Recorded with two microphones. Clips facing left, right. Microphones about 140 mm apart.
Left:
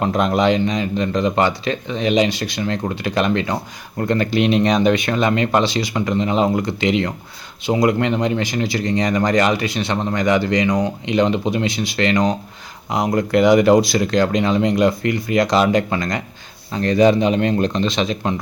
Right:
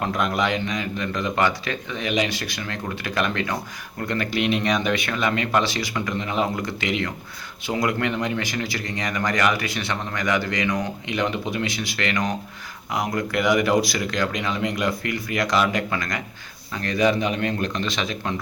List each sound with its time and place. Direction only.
0.0 s speech: 25° left (ahead or behind)